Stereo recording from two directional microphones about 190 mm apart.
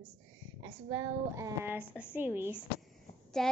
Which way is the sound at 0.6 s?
20° right (ahead or behind).